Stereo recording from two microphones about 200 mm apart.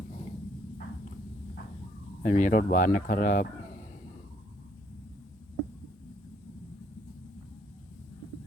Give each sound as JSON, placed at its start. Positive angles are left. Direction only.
{"t": 2.2, "sound": "speech", "side_deg": 40}